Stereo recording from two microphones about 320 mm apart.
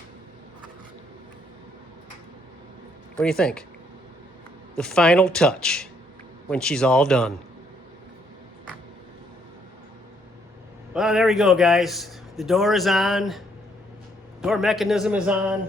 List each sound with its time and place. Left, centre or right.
3.2 s a man's voice: centre
4.8 s a man's voice: centre
10.9 s a man's voice: centre
14.4 s a man's voice: centre